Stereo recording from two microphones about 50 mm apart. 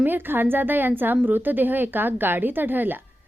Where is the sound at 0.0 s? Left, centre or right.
Right.